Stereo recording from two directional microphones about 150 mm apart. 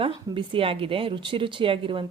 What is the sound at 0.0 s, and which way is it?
A woman's voice, 35° right (ahead or behind).